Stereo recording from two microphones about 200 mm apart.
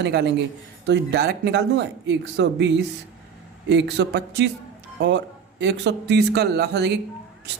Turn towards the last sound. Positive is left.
turn(degrees=-55)  # may be behind; listen again after turning